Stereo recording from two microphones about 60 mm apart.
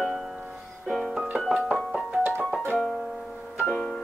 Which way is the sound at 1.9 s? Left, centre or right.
Centre.